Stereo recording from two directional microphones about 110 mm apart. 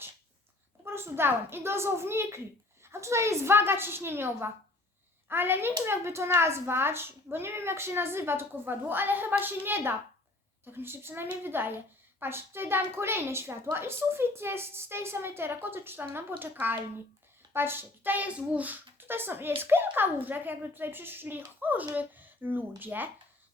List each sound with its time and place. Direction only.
0.9 s a woman's voice: 20° right (ahead or behind)